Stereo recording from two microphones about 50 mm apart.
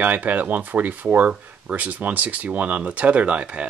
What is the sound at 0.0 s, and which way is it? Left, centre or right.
Speech, right.